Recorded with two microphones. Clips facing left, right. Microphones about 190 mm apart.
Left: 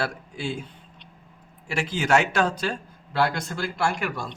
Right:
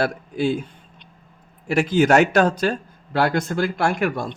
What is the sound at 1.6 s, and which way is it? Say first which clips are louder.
Speech: right 10 dB; 45° right (ahead or behind).